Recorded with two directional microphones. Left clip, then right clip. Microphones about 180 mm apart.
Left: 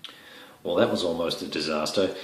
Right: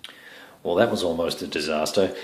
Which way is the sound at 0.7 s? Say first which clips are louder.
Right 2 dB; 45° right (ahead or behind).